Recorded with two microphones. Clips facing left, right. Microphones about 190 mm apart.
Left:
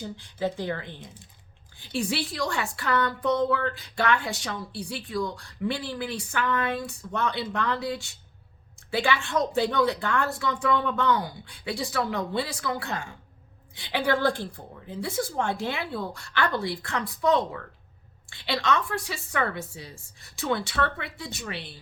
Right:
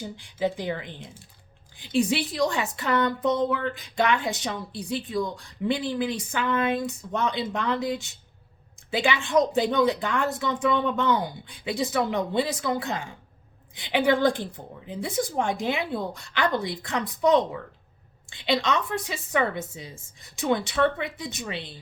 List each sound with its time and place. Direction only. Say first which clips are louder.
0.0 s a woman's voice: right 2 dB; 15° right (ahead or behind)